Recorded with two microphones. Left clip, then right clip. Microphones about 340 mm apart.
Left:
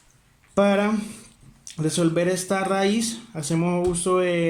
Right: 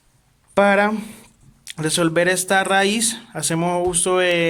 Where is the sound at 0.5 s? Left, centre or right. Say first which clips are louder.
Right 5 dB; right.